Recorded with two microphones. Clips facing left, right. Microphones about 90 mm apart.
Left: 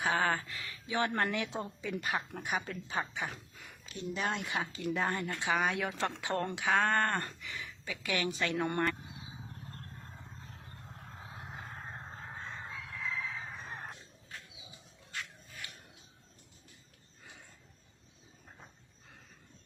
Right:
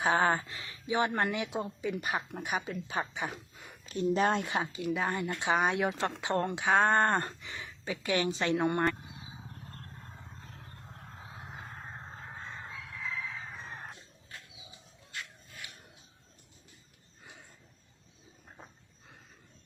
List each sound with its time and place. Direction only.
0.0 s speech: 25° right (ahead or behind)
3.8 s speech: 40° right (ahead or behind)
4.8 s speech: centre (ahead or behind)
5.1 s speech: 15° right (ahead or behind)